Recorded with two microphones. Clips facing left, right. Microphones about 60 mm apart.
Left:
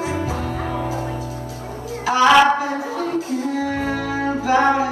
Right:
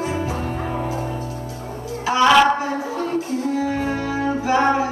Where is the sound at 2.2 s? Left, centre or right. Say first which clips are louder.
Left 1 dB; centre.